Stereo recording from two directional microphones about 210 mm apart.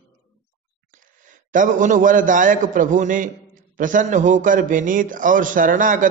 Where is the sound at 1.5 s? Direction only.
40° right (ahead or behind).